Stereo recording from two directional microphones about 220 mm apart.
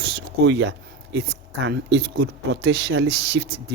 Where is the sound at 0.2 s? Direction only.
55° right (ahead or behind).